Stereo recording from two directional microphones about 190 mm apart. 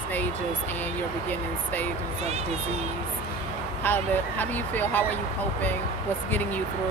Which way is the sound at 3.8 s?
10° left (ahead or behind).